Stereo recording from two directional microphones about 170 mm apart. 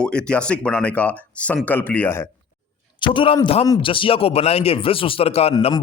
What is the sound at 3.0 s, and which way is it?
A man's voice, 30° left (ahead or behind).